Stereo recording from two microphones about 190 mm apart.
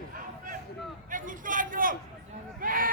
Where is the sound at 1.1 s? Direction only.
45° right (ahead or behind).